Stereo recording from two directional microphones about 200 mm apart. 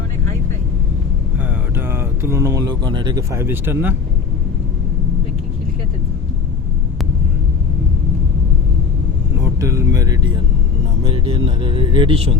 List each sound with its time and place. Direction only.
1.7 s speech: 10° right (ahead or behind)
9.4 s vehicle: 15° right (ahead or behind)
11.0 s speech: 25° right (ahead or behind)